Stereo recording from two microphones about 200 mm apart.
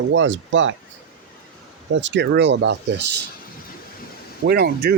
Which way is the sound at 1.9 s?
65° right (ahead or behind).